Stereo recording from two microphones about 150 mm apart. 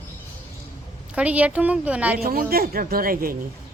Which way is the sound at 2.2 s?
75° right (ahead or behind).